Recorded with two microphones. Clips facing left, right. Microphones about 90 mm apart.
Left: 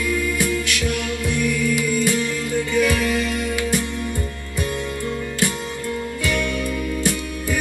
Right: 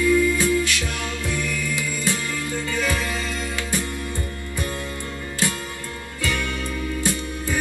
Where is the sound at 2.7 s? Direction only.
25° right (ahead or behind).